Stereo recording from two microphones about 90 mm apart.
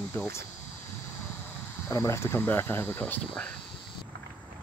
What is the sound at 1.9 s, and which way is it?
Speech, 30° left (ahead or behind).